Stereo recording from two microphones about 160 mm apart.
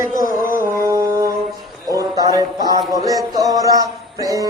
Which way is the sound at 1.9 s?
20° right (ahead or behind).